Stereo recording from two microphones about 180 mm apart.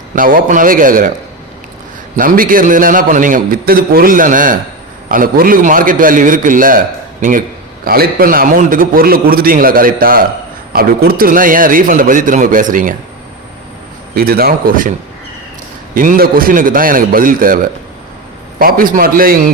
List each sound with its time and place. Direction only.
0.2 s a man's voice: 50° right (ahead or behind)
2.1 s a man's voice: 50° right (ahead or behind)
14.2 s speech: 55° right (ahead or behind)
16.0 s a man's voice: 50° right (ahead or behind)
18.6 s a man's voice: 50° right (ahead or behind)